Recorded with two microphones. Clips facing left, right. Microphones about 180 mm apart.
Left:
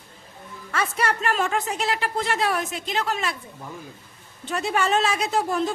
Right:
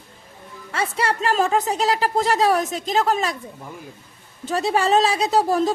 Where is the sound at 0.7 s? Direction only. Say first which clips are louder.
Right 2 dB; 30° right (ahead or behind).